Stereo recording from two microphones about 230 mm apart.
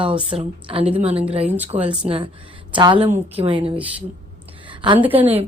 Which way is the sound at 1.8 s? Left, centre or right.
Centre.